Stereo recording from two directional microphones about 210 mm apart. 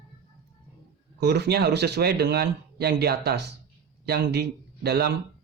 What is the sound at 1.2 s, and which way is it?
Speech, 50° right (ahead or behind).